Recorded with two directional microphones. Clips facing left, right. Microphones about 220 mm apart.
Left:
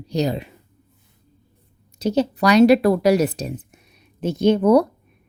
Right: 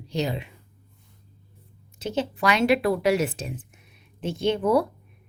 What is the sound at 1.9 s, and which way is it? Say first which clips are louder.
A woman's voice: left 7 dB; 40° left (ahead or behind).